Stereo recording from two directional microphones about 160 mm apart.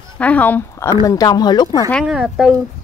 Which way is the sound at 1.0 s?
25° left (ahead or behind).